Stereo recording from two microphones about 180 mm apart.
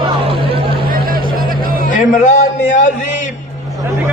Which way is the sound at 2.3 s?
45° left (ahead or behind).